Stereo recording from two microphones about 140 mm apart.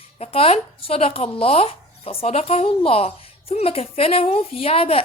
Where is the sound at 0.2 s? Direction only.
45° left (ahead or behind).